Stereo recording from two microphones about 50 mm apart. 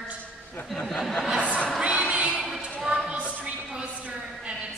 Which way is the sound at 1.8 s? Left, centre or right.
Right.